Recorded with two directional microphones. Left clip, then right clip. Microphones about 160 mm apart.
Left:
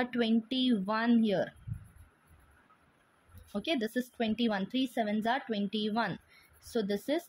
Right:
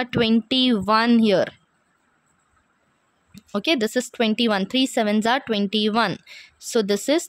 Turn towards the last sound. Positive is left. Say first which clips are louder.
# right 12 dB
turn(degrees=-45)  # may be behind; listen again after turning